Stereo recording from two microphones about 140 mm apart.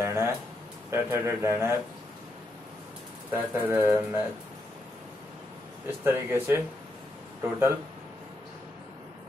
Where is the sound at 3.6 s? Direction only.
15° right (ahead or behind).